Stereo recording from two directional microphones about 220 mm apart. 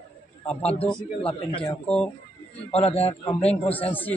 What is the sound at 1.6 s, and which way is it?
Speech, 5° left (ahead or behind).